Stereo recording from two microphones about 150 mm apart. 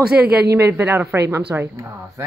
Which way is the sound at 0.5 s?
15° right (ahead or behind).